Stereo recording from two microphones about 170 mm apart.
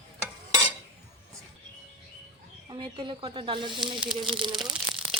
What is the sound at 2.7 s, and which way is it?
Speech, 30° right (ahead or behind).